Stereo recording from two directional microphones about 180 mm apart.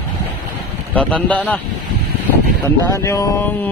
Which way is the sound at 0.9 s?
5° left (ahead or behind).